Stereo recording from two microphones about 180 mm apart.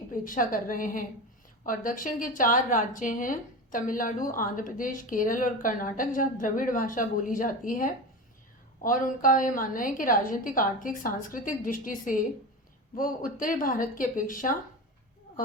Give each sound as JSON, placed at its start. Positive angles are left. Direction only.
{"t": 0.1, "sound": "a woman's voice", "side_deg": 50}